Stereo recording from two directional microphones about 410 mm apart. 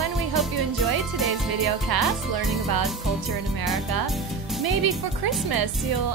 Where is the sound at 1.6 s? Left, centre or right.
Right.